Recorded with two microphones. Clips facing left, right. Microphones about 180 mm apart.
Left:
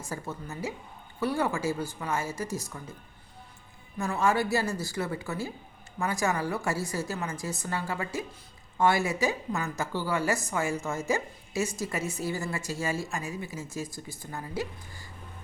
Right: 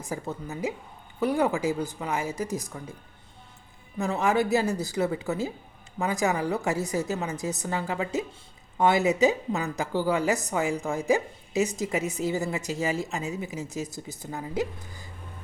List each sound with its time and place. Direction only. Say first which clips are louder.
0.0 s speech: right 4 dB; 15° right (ahead or behind)
3.9 s a woman's voice: right 2 dB; 20° right (ahead or behind)